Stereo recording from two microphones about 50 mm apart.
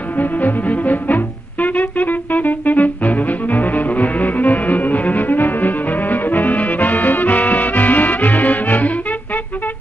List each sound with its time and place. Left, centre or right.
0.2 s music: left